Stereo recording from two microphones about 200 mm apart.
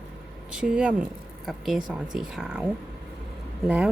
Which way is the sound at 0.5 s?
5° right (ahead or behind).